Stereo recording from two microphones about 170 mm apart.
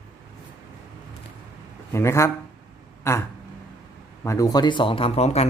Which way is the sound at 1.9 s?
15° left (ahead or behind).